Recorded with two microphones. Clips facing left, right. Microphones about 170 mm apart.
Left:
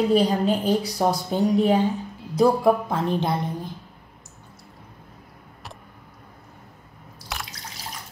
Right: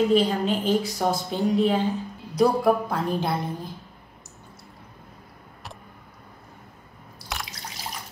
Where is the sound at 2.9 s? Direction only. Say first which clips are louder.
Left 2 dB; 20° left (ahead or behind).